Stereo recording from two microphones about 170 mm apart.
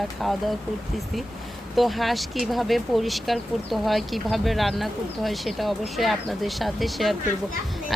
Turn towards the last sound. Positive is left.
turn(degrees=0)  # may be behind; listen again after turning